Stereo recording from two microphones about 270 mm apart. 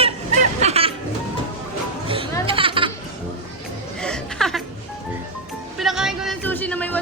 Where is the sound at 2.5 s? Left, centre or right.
Centre.